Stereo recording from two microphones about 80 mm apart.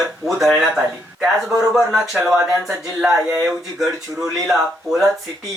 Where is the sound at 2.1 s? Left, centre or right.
Centre.